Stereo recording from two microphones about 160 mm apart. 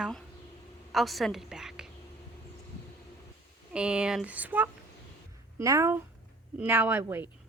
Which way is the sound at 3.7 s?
5° right (ahead or behind).